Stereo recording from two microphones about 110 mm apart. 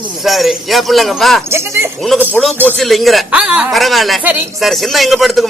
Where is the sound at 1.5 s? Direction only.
25° right (ahead or behind).